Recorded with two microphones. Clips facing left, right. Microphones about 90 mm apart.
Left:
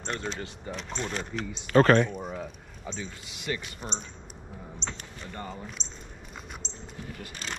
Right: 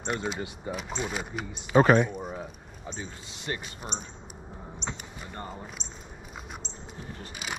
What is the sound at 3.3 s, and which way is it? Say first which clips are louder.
Speech: left 2 dB; 30° right (ahead or behind).